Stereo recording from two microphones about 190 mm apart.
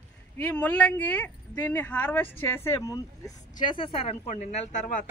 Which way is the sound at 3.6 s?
25° left (ahead or behind).